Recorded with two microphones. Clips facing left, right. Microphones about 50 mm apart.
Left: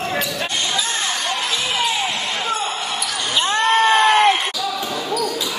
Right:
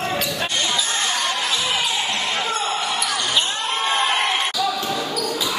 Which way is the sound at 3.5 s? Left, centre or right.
Left.